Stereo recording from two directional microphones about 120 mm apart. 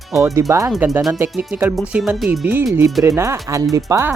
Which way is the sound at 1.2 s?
10° right (ahead or behind).